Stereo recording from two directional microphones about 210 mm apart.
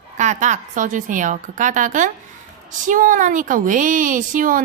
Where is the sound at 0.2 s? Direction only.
35° right (ahead or behind).